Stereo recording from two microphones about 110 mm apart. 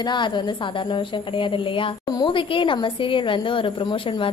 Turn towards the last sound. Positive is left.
turn(degrees=50)  # may be behind; listen again after turning